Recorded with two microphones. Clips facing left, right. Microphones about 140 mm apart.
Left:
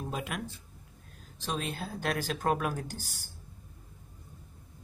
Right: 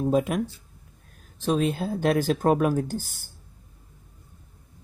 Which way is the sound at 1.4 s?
50° right (ahead or behind).